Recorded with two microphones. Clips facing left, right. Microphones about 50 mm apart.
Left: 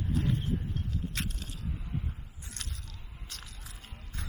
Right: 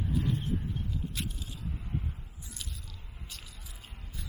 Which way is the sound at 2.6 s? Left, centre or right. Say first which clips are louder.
Left 1 dB; left.